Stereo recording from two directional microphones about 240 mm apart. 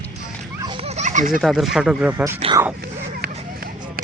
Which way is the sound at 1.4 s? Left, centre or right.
Centre.